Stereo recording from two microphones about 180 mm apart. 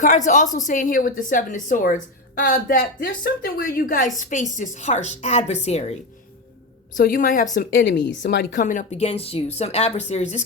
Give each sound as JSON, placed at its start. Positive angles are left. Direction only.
{"t": 0.0, "sound": "a woman's voice", "side_deg": 45}
{"t": 7.1, "sound": "a woman's voice", "side_deg": 50}
{"t": 7.8, "sound": "speech", "side_deg": 75}
{"t": 8.5, "sound": "speech", "side_deg": 45}